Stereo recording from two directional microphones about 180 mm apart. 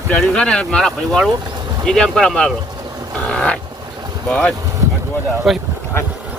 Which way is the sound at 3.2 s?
5° left (ahead or behind).